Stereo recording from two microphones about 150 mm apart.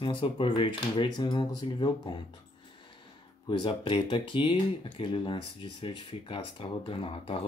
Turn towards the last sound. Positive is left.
turn(degrees=35)  # may be behind; listen again after turning